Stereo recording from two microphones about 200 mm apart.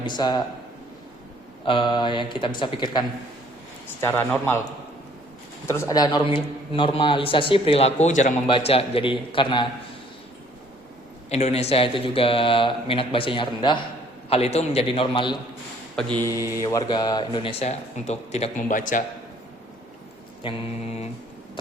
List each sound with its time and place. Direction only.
0.0 s a man's voice: 20° left (ahead or behind)
1.6 s a man's voice: 25° left (ahead or behind)
4.0 s speech: 10° left (ahead or behind)
5.6 s a man's voice: 15° left (ahead or behind)
11.3 s a man's voice: 30° left (ahead or behind)
16.0 s mantra: 20° right (ahead or behind)
16.6 s a man's voice: 15° left (ahead or behind); by 19.0 s 40° left (ahead or behind)
20.4 s a man's voice: 30° left (ahead or behind)